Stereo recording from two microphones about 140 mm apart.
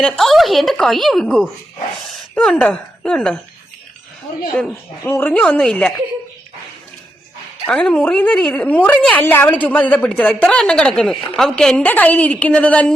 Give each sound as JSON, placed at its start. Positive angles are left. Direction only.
{"t": 0.0, "sound": "a woman's voice", "side_deg": 0}
{"t": 5.0, "sound": "a woman's voice", "side_deg": 15}
{"t": 7.7, "sound": "a woman's voice", "side_deg": 5}